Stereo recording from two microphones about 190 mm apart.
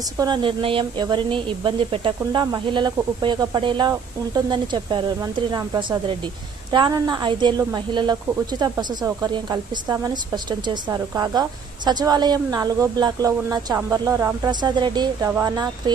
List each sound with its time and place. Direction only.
0.2 s speech: 25° right (ahead or behind)